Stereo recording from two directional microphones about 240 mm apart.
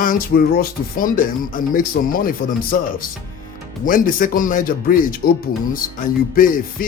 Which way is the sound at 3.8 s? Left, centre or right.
Left.